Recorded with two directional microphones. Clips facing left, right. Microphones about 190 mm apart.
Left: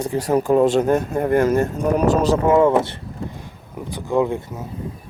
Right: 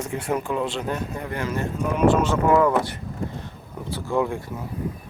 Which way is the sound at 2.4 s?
25° left (ahead or behind).